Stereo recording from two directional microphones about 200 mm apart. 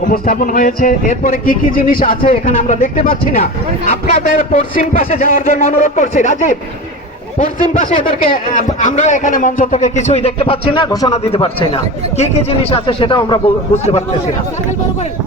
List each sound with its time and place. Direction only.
0.1 s a man's voice: 45° left (ahead or behind); by 11.1 s 20° left (ahead or behind)
11.1 s speech: 30° left (ahead or behind)
13.7 s a man's voice: 35° left (ahead or behind)